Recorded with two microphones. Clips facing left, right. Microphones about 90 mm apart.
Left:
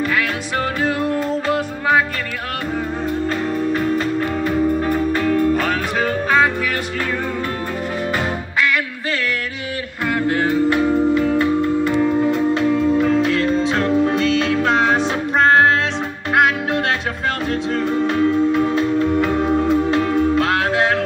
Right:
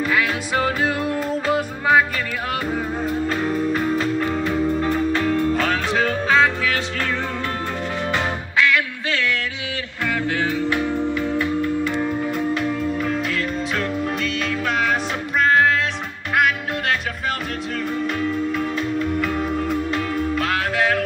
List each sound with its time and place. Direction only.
0.0 s music: 10° right (ahead or behind)
3.3 s music: centre (ahead or behind)
10.0 s music: 15° left (ahead or behind); by 15.7 s 35° left (ahead or behind)
17.5 s music: 30° left (ahead or behind)